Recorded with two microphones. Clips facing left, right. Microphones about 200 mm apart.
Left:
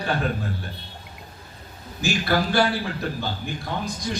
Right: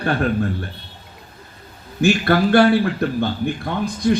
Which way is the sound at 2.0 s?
60° right (ahead or behind).